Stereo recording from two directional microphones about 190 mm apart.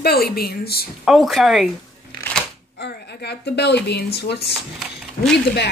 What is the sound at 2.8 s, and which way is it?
A woman's voice, 60° left (ahead or behind).